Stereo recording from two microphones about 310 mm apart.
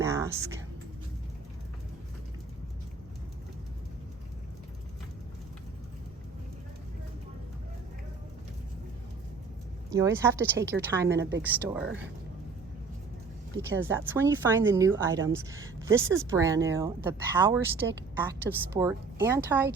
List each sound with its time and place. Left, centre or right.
0.0 s a sound: centre
9.9 s speech: centre
11.2 s speech: right
11.4 s speech: centre
13.6 s speech: centre